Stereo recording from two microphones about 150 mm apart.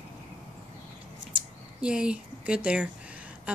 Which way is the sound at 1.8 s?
5° right (ahead or behind).